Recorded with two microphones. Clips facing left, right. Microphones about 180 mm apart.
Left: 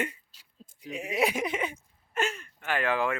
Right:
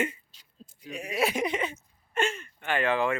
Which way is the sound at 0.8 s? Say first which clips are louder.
Left 1 dB; 20° left (ahead or behind).